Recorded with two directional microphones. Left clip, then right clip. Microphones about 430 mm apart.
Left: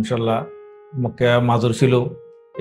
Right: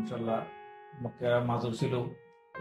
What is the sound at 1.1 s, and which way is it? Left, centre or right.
Speech, left.